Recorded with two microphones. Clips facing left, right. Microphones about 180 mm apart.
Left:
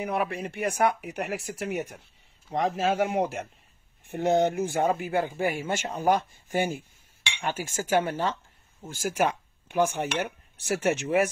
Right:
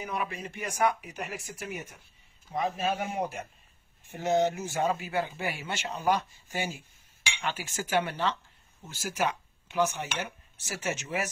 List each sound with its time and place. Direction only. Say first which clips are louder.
0.0 s speech: left 6 dB; 60° left (ahead or behind)
2.5 s speech: left 4 dB; 85° left
4.0 s speech: left 3 dB; 60° left (ahead or behind)